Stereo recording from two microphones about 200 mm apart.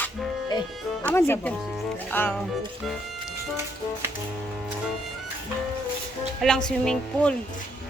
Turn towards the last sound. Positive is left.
turn(degrees=5)  # may be behind; listen again after turning